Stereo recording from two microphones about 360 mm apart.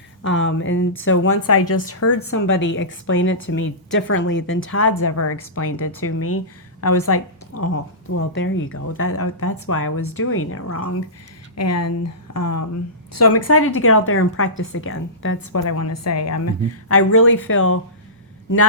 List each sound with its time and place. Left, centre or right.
0.2 s speech: left